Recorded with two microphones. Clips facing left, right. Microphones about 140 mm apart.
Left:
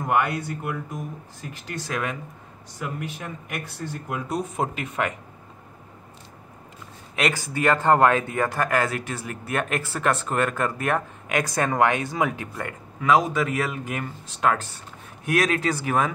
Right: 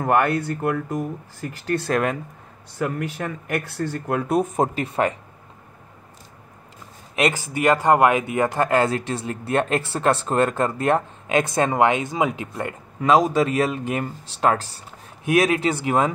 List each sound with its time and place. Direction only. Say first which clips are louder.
0.0 s speech: right 4 dB; 65° right (ahead or behind)
1.8 s speech: right 5 dB; 50° right (ahead or behind)
2.8 s speech: right 7 dB; 70° right (ahead or behind)
4.6 s speech: right 5 dB; 35° right (ahead or behind)
7.2 s speech: right 3 dB; 20° right (ahead or behind)
15.6 s speech: right 3 dB; 20° right (ahead or behind)